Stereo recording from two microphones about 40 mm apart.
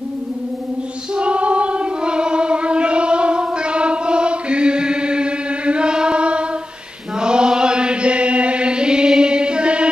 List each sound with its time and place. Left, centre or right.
1.1 s choir: right
7.2 s chant: right